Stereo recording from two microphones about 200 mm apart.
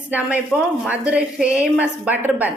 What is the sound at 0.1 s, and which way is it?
A woman's voice, 10° right (ahead or behind).